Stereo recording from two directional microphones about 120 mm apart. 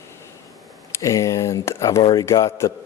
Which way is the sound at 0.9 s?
25° left (ahead or behind).